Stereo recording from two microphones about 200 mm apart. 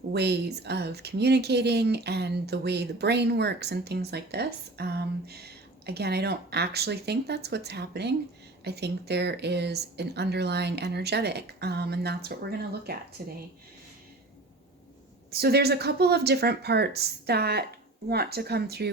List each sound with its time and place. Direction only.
0.1 s speech: 55° right (ahead or behind)
15.3 s speech: 55° right (ahead or behind)